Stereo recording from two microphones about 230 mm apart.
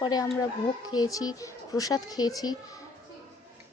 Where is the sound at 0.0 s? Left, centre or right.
Centre.